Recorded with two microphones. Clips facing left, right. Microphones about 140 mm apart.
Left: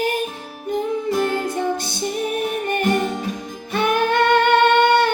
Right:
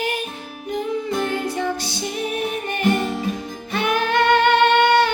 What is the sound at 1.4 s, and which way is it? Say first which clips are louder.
Music: left 1 dB; 50° left (ahead or behind).